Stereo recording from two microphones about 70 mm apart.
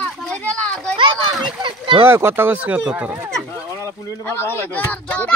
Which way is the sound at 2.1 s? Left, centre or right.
Right.